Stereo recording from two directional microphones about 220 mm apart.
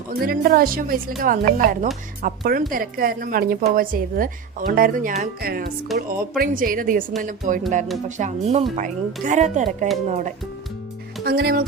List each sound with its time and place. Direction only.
0.1 s a woman's voice: 45° right (ahead or behind)
11.2 s speech: 45° right (ahead or behind)